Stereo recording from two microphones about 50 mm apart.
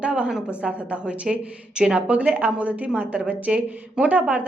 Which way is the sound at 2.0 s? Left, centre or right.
Right.